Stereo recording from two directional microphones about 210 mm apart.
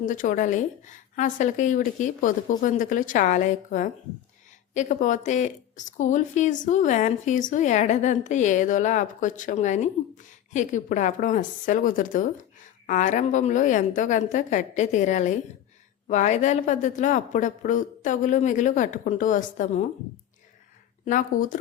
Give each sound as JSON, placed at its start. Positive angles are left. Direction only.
{"t": 0.0, "sound": "speech", "side_deg": 40}
{"t": 21.0, "sound": "speech", "side_deg": 40}